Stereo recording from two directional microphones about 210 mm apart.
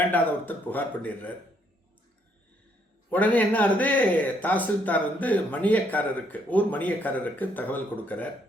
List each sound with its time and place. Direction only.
0.0 s a man's voice: 10° left (ahead or behind)
3.1 s a man's voice: 5° left (ahead or behind)